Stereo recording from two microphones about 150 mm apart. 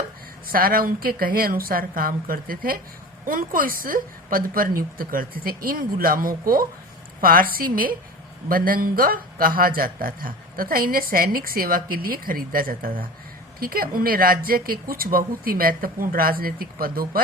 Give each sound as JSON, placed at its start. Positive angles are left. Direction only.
{"t": 0.4, "sound": "speech", "side_deg": -75}